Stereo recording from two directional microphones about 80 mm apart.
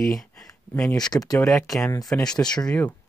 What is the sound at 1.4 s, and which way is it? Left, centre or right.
Speech, centre.